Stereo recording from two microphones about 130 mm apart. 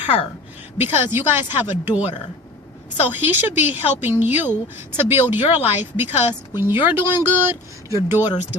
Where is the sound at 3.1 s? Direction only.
15° right (ahead or behind).